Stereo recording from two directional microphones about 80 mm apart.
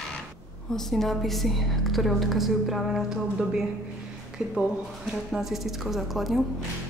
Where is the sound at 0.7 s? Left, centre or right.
Centre.